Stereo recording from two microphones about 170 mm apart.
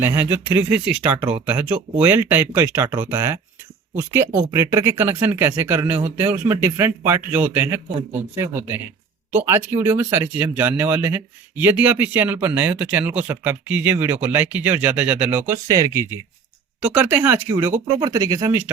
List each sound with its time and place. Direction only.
0.0 s speech: 10° right (ahead or behind)